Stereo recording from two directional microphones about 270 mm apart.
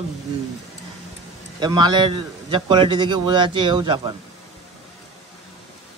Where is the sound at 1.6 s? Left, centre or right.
Centre.